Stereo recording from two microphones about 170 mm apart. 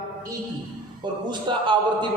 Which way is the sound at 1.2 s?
25° right (ahead or behind).